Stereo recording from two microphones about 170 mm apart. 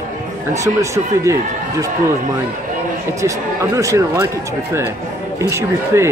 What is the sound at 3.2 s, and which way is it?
A man's voice, 20° right (ahead or behind).